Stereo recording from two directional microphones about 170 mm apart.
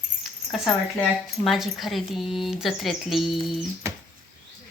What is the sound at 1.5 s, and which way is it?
A woman's voice, centre (ahead or behind).